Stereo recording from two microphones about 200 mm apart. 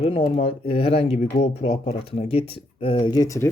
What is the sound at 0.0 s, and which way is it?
Speech, 30° left (ahead or behind).